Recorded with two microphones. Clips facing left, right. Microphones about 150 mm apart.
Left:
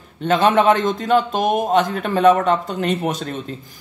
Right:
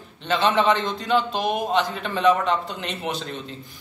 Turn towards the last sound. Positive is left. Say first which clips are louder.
# left 7 dB
turn(degrees=45)  # may be behind; listen again after turning